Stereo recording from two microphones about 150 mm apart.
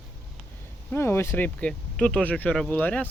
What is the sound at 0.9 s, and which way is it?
Speech, 15° left (ahead or behind).